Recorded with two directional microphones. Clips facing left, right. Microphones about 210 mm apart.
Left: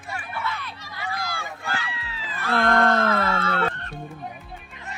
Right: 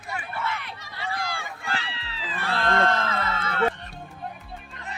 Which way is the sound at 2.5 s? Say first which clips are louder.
Left 4 dB; 55° left (ahead or behind).